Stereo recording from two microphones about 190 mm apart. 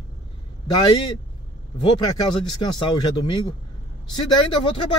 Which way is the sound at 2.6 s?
25° left (ahead or behind).